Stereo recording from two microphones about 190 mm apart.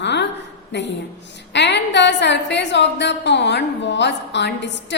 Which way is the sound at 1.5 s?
65° left (ahead or behind).